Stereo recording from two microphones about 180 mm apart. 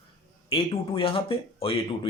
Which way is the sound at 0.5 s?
30° left (ahead or behind).